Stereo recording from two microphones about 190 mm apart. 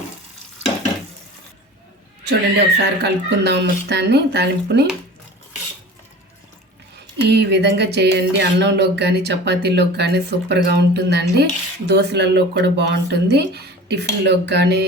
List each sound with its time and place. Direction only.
2.2 s speech: 60° right (ahead or behind)
7.3 s speech: 60° right (ahead or behind)